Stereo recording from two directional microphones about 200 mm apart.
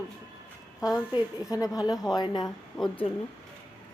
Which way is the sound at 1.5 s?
15° left (ahead or behind).